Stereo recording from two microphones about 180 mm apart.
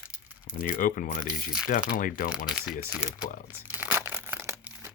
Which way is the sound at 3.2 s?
50° left (ahead or behind).